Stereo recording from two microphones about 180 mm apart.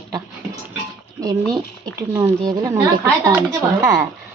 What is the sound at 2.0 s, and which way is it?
Speech, 15° right (ahead or behind).